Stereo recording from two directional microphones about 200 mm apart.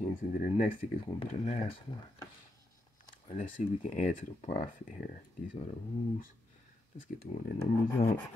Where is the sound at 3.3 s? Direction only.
35° left (ahead or behind).